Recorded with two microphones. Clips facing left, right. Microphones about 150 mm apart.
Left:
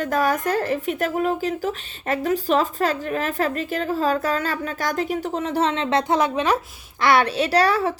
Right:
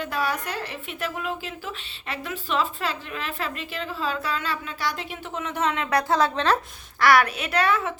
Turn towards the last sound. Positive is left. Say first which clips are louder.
# left 5 dB
turn(degrees=35)  # may be behind; listen again after turning